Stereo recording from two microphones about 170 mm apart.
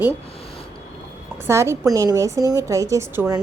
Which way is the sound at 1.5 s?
15° right (ahead or behind).